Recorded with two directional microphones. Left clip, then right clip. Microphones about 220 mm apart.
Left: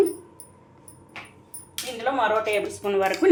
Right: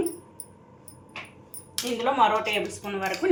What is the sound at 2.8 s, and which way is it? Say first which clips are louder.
Speech: left 6 dB; 45° left (ahead or behind).